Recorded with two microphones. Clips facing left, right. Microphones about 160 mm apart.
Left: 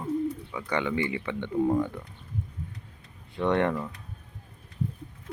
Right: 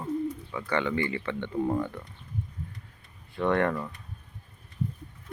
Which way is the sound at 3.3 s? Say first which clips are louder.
Even; 20° left (ahead or behind).